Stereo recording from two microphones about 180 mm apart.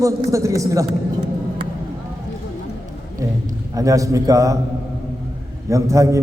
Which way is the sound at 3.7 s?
20° right (ahead or behind).